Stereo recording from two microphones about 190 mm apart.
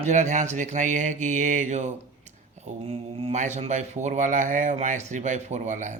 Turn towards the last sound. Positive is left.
turn(degrees=-40)  # may be behind; listen again after turning